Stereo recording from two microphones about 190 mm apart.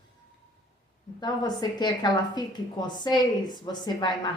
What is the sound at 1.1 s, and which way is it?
A woman's voice, 20° left (ahead or behind).